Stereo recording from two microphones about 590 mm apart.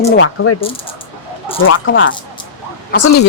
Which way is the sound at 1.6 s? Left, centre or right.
Centre.